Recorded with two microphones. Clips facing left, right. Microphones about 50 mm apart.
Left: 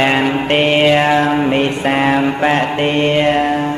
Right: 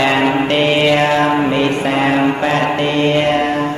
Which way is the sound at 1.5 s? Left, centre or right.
Left.